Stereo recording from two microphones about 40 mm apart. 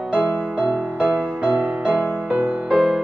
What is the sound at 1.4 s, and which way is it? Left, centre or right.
Music, right.